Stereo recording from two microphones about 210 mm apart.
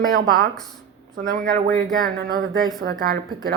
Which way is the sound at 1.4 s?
55° right (ahead or behind).